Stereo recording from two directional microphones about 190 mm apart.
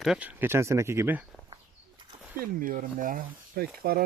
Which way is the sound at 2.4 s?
50° right (ahead or behind).